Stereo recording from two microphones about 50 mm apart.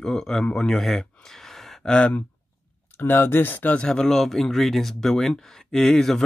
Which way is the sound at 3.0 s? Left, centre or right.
Left.